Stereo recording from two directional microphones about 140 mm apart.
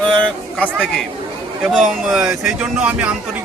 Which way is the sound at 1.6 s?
Centre (ahead or behind).